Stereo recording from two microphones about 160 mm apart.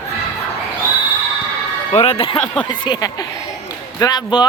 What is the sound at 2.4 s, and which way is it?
Speech, 5° left (ahead or behind).